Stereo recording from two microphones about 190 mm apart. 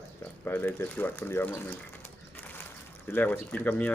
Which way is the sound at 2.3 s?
10° left (ahead or behind).